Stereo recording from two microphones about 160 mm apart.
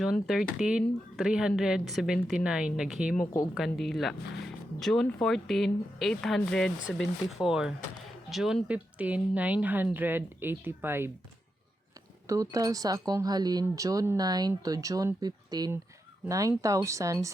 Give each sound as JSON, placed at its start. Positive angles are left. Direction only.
{"t": 0.0, "sound": "speech", "side_deg": 0}
{"t": 12.3, "sound": "speech", "side_deg": -20}